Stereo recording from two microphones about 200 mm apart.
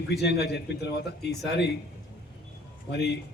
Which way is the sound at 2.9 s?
55° left (ahead or behind).